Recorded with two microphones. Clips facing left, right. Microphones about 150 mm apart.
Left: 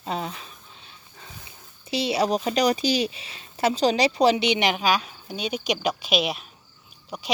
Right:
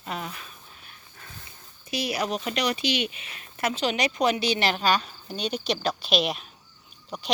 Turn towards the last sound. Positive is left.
turn(degrees=10)  # may be behind; listen again after turning